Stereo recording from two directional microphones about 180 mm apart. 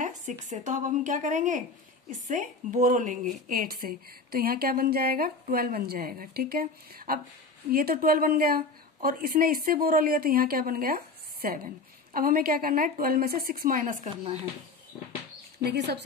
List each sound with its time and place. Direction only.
0.0 s a woman's voice: 45° right (ahead or behind)